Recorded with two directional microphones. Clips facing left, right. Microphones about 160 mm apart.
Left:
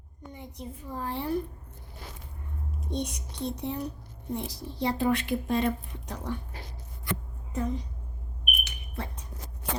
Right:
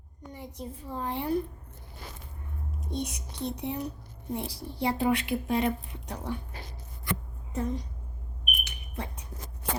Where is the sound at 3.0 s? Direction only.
5° right (ahead or behind).